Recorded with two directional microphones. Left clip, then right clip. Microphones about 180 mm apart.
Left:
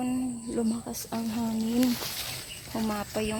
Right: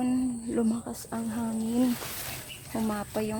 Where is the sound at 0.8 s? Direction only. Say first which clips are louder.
Left 1 dB; 5° right (ahead or behind).